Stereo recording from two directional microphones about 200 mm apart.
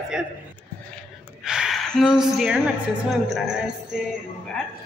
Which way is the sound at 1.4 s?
5° right (ahead or behind).